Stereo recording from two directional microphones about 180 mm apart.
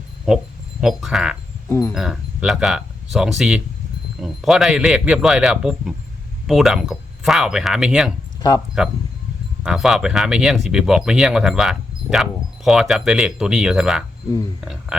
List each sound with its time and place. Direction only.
0.8 s speech: centre (ahead or behind)
8.4 s speech: 20° left (ahead or behind)
9.6 s speech: centre (ahead or behind)